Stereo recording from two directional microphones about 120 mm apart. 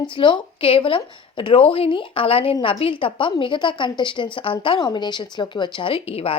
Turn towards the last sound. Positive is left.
turn(degrees=55)  # may be behind; listen again after turning